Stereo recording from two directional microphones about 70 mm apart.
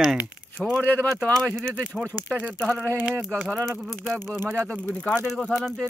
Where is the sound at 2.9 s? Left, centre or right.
Right.